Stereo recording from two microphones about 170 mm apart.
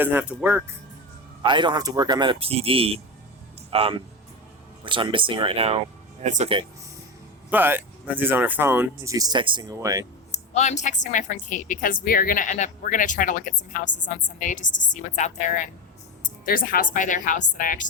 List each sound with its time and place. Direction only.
0.0 s speech: 10° right (ahead or behind)
1.4 s a man's voice: 25° right (ahead or behind); by 6.5 s 45° right (ahead or behind)
7.5 s speech: 10° right (ahead or behind)
10.3 s a woman's voice: 40° left (ahead or behind)